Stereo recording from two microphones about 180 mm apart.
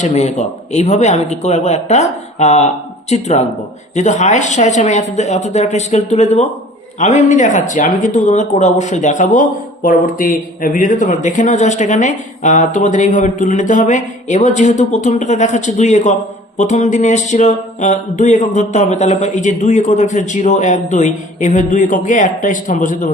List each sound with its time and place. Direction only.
0.0 s speech: 40° left (ahead or behind)